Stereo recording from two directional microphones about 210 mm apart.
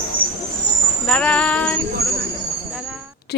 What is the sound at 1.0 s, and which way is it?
Music, 5° left (ahead or behind).